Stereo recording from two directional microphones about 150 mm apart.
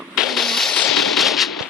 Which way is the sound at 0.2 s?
Centre (ahead or behind).